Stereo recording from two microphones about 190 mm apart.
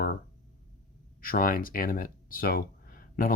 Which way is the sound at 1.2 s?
50° left (ahead or behind).